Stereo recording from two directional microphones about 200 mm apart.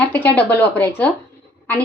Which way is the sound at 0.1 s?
10° left (ahead or behind).